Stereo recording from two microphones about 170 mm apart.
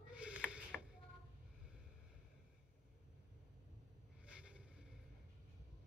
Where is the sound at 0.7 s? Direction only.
10° left (ahead or behind).